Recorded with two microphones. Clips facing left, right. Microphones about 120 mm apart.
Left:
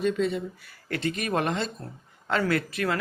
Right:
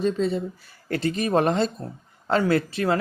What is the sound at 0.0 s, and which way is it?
Speech, 30° right (ahead or behind).